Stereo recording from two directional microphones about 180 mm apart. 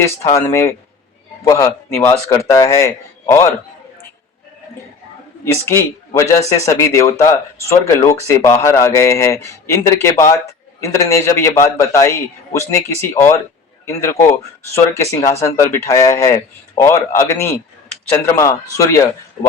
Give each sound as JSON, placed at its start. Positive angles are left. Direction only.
{"t": 0.0, "sound": "speech", "side_deg": 15}
{"t": 6.1, "sound": "speech", "side_deg": 15}